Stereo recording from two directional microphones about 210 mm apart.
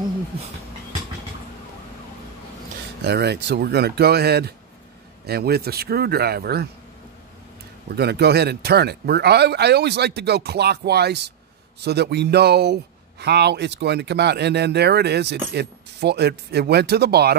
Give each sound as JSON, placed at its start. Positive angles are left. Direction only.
{"t": 3.0, "sound": "speech", "side_deg": -50}
{"t": 7.9, "sound": "speech", "side_deg": -50}